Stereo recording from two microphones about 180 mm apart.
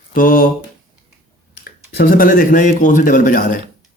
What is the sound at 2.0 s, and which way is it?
Speech, 55° left (ahead or behind).